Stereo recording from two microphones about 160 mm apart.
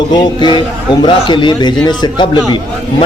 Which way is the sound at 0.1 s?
30° left (ahead or behind).